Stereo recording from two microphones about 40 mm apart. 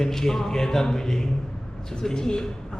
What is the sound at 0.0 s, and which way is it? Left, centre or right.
A man's voice, centre.